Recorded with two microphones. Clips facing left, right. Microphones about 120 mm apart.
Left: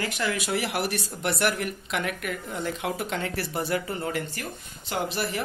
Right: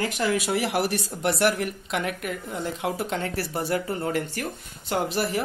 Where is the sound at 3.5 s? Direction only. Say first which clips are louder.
Right 2 dB; 5° right (ahead or behind).